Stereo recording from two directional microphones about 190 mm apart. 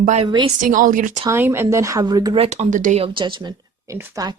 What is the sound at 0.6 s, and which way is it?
Speech, 45° right (ahead or behind).